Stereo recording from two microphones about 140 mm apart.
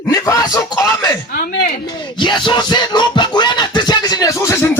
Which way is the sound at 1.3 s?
90° left.